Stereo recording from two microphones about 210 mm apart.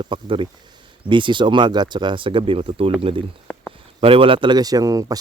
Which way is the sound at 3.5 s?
5° left (ahead or behind).